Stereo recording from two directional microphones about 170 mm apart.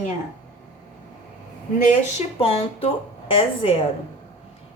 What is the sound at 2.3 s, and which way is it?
A woman's voice, 35° left (ahead or behind).